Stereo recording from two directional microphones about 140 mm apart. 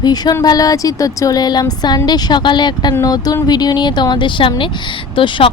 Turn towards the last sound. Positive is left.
turn(degrees=40)  # may be behind; listen again after turning